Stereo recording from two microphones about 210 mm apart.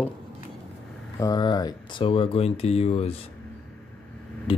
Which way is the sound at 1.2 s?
20° left (ahead or behind).